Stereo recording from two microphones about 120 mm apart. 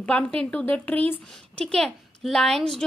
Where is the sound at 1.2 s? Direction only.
5° left (ahead or behind).